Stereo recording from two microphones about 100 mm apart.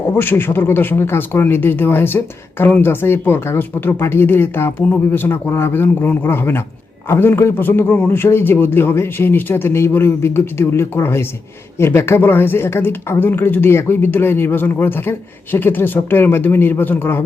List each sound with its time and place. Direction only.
0.2 s speech: 20° left (ahead or behind)